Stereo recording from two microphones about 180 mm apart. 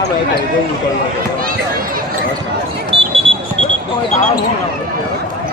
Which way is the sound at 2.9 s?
30° right (ahead or behind).